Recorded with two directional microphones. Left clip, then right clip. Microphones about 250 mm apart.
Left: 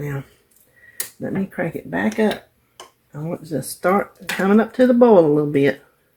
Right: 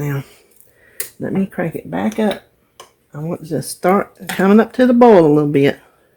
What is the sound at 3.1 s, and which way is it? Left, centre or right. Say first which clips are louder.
Speech: right 4 dB; right.